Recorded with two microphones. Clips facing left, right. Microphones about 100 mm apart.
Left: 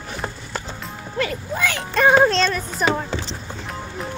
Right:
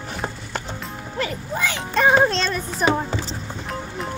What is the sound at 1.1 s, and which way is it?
Speech, 25° right (ahead or behind).